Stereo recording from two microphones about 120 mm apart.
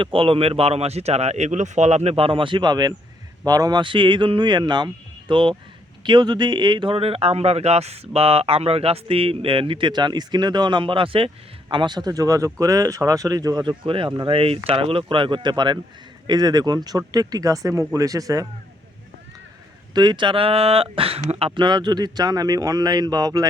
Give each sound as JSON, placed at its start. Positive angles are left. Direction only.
{"t": 0.0, "sound": "speech", "side_deg": -50}
{"t": 19.9, "sound": "speech", "side_deg": -35}
{"t": 21.5, "sound": "speech", "side_deg": -40}